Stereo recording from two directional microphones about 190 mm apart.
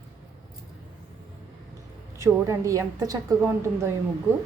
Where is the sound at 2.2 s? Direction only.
15° right (ahead or behind).